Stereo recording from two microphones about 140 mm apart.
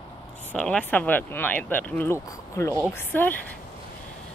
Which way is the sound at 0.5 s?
10° left (ahead or behind).